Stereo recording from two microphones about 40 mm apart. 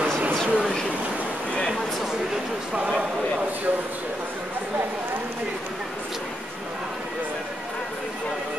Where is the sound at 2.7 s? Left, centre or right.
Right.